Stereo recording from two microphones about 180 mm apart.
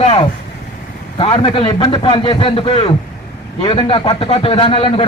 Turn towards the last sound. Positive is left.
turn(degrees=30)  # may be behind; listen again after turning